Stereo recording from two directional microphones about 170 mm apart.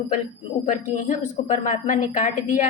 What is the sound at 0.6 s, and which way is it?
A woman's voice, 50° left (ahead or behind).